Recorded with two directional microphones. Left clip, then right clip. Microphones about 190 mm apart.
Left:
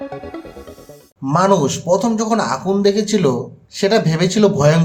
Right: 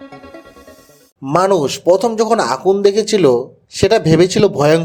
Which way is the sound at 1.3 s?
40° right (ahead or behind).